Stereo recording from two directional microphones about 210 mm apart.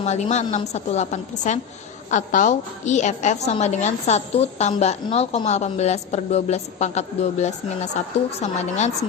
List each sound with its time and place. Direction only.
0.0 s a woman's voice: 30° left (ahead or behind)